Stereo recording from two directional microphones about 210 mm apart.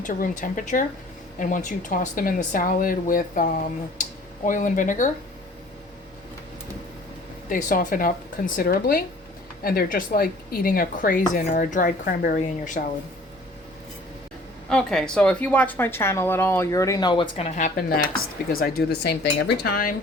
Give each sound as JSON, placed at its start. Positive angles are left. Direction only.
{"t": 0.0, "sound": "speech", "side_deg": 40}
{"t": 7.5, "sound": "speech", "side_deg": 40}
{"t": 14.7, "sound": "speech", "side_deg": 5}